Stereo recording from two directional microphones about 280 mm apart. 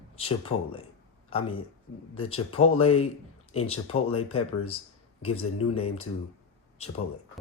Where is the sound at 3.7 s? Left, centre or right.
Left.